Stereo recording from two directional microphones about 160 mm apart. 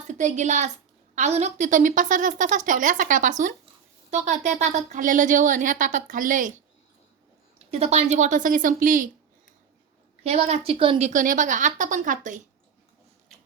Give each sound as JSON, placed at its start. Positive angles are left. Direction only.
{"t": 0.1, "sound": "a woman's voice", "side_deg": -50}
{"t": 7.7, "sound": "a woman's voice", "side_deg": -40}
{"t": 10.2, "sound": "a woman's voice", "side_deg": -40}
{"t": 11.1, "sound": "a woman's voice", "side_deg": -55}